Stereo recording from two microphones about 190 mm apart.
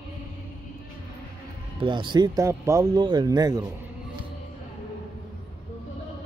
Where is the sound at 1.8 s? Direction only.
25° right (ahead or behind).